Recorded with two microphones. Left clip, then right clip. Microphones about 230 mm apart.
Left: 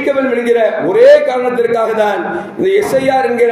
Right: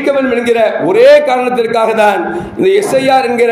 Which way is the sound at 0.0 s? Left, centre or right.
Right.